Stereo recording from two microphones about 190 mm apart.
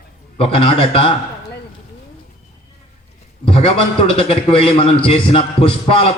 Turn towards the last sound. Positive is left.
turn(degrees=30)  # may be behind; listen again after turning